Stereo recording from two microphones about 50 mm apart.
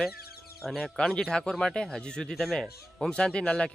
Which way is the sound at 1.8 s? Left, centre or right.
Centre.